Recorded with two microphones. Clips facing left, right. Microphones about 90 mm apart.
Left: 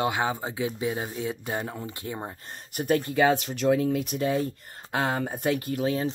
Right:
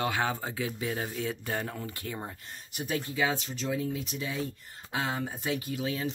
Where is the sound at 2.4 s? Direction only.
55° left (ahead or behind).